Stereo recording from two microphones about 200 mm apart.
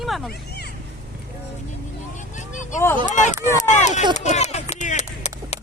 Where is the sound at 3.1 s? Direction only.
40° left (ahead or behind).